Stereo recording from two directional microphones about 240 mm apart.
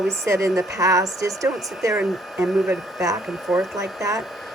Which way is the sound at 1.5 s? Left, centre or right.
Centre.